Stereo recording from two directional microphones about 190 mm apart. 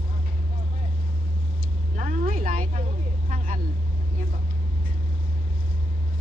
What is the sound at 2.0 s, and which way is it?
Vehicle, 45° right (ahead or behind).